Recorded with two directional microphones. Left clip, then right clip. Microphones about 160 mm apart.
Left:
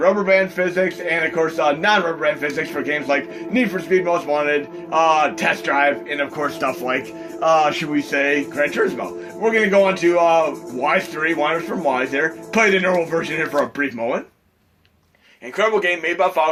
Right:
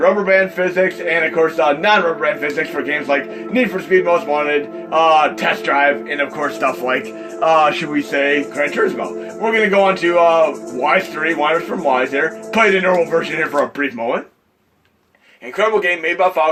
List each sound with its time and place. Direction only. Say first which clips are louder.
0.0 s a man's voice: right 3 dB; 25° right (ahead or behind)
15.5 s a man's voice: right 2 dB; 25° right (ahead or behind)